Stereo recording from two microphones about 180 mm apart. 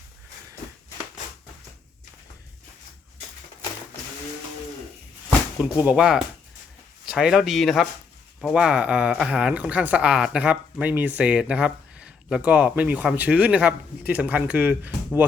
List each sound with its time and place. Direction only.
5.6 s speech: 10° right (ahead or behind)